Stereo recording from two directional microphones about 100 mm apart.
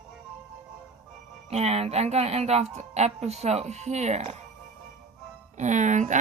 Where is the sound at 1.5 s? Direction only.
90° right.